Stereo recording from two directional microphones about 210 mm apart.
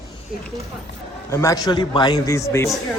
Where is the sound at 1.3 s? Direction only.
15° left (ahead or behind).